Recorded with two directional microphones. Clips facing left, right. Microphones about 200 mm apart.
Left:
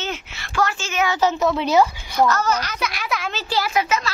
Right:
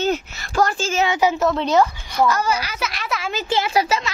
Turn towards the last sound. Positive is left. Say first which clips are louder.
# right 2 dB
turn(degrees=-35)  # may be behind; listen again after turning